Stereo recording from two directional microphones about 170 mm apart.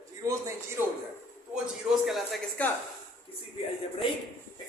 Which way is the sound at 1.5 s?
5° right (ahead or behind).